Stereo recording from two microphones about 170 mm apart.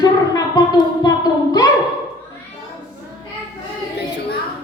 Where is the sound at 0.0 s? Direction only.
25° left (ahead or behind).